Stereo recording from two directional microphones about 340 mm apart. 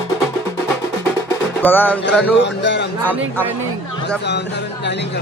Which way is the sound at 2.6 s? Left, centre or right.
Left.